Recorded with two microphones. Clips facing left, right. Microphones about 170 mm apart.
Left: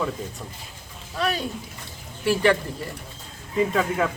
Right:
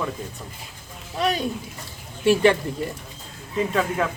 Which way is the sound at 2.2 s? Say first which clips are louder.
Right 3 dB; 20° right (ahead or behind).